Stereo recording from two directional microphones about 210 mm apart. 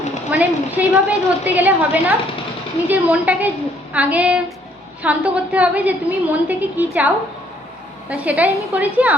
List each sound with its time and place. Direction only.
0.3 s a woman's voice: 5° right (ahead or behind)
8.1 s a woman's voice: 5° right (ahead or behind)